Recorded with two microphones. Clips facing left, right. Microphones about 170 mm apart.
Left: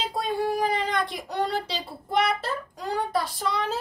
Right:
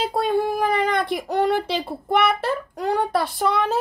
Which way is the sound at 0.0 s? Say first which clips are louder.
Right 6 dB; 60° right (ahead or behind).